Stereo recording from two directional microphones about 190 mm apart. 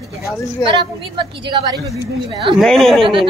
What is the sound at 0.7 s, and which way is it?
A woman's voice, 25° right (ahead or behind).